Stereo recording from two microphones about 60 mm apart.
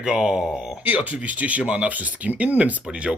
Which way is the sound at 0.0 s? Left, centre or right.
Centre.